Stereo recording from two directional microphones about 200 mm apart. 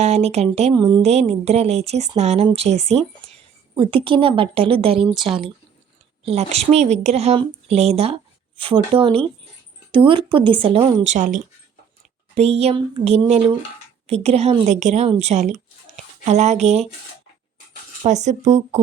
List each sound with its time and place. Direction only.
0.0 s speech: 35° right (ahead or behind)
1.0 s a woman's voice: 30° right (ahead or behind)
5.1 s speech: centre (ahead or behind)
6.2 s a woman's voice: 30° right (ahead or behind)
18.0 s speech: 35° right (ahead or behind)